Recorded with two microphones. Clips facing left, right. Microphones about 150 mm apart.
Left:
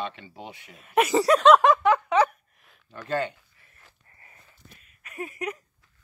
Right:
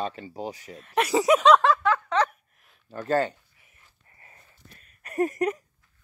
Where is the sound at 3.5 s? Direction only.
15° right (ahead or behind).